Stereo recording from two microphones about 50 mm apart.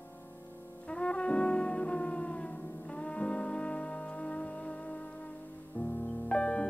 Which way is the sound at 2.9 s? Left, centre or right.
Left.